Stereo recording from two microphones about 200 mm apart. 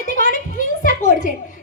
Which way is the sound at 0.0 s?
40° left (ahead or behind).